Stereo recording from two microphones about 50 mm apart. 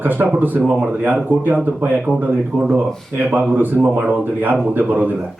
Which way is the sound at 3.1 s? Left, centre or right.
Right.